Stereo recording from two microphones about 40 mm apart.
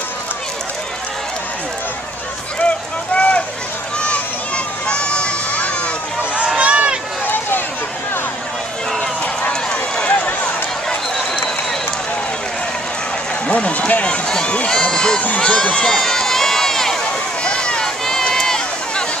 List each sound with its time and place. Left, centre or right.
3.2 s boat: left
4.8 s run: left
6.6 s run: right
10.0 s run: left
13.5 s run: left
14.0 s run: left
15.1 s crowd: left; by 17.0 s centre
17.4 s run: left